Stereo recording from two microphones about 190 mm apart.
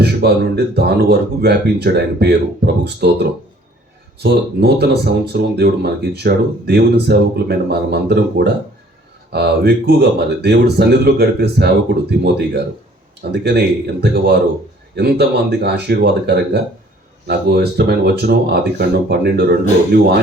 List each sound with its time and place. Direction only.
0.0 s speech: 60° right (ahead or behind)
13.3 s speech: 60° right (ahead or behind)